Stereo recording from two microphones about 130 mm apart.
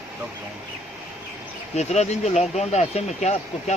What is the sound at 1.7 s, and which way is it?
Speech, 60° left (ahead or behind).